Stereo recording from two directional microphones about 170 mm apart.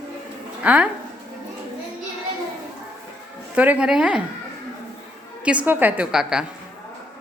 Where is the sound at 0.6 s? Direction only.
10° right (ahead or behind).